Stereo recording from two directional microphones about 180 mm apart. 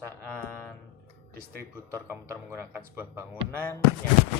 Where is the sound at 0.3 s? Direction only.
5° left (ahead or behind).